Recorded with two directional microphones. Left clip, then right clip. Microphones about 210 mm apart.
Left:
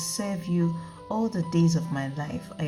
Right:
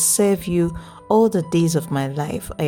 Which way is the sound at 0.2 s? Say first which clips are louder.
Right 14 dB; 55° right (ahead or behind).